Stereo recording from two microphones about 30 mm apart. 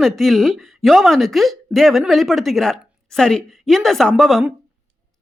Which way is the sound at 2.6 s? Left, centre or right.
Centre.